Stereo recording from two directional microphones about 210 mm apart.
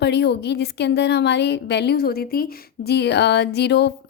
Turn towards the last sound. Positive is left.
turn(degrees=55)  # may be behind; listen again after turning